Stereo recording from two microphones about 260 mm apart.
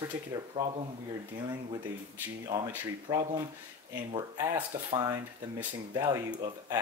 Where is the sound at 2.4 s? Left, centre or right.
Centre.